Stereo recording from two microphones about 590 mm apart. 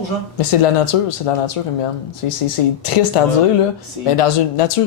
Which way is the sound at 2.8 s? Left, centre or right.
Left.